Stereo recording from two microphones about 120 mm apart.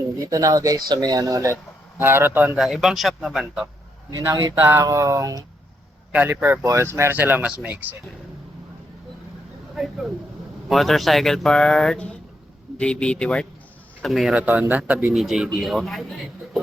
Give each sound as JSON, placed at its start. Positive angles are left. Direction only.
{"t": 0.3, "sound": "speech", "side_deg": -30}
{"t": 2.6, "sound": "speech", "side_deg": 0}
{"t": 4.2, "sound": "speech", "side_deg": -30}
{"t": 6.1, "sound": "speech", "side_deg": -15}
{"t": 10.7, "sound": "speech", "side_deg": 0}
{"t": 14.3, "sound": "speech", "side_deg": -15}